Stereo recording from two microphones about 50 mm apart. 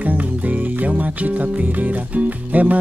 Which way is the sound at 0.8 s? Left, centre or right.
Right.